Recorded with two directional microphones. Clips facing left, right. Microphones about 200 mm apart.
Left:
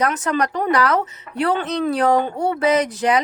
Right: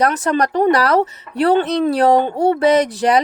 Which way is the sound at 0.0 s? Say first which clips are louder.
Right 4 dB; 35° right (ahead or behind).